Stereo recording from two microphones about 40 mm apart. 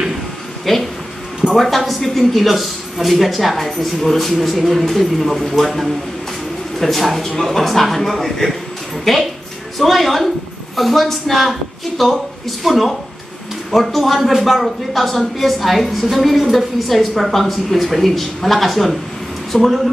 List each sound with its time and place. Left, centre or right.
0.7 s a woman's voice: centre